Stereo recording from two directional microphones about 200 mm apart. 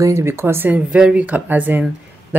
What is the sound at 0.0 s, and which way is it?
Speech, 15° right (ahead or behind).